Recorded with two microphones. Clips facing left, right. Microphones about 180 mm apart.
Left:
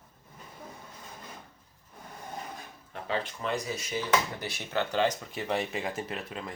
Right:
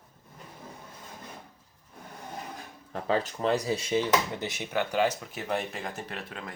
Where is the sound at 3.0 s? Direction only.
35° right (ahead or behind).